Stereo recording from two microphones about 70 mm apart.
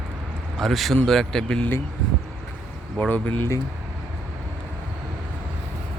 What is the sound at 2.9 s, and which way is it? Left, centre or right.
Speech, centre.